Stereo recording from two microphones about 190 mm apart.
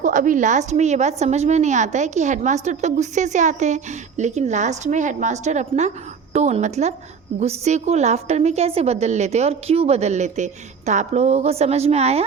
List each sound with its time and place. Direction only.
0.0 s a woman's voice: 45° right (ahead or behind)